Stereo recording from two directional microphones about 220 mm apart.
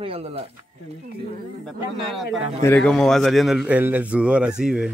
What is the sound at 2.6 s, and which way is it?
A man's voice, 5° left (ahead or behind).